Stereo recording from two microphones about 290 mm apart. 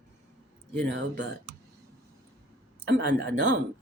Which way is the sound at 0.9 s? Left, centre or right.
Right.